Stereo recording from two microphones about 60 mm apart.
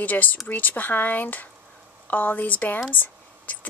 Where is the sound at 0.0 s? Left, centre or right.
Left.